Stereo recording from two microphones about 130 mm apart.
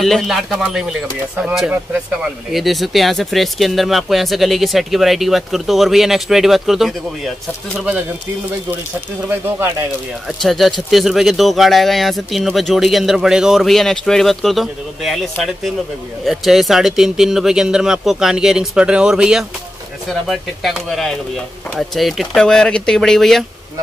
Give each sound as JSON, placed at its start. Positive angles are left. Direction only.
{"t": 0.0, "sound": "speech", "side_deg": 0}
{"t": 9.3, "sound": "speech", "side_deg": -15}
{"t": 10.2, "sound": "speech", "side_deg": 0}
{"t": 16.3, "sound": "speech", "side_deg": 0}